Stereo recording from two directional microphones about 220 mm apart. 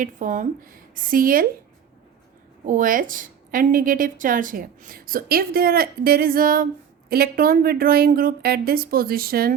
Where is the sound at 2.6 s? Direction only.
35° right (ahead or behind).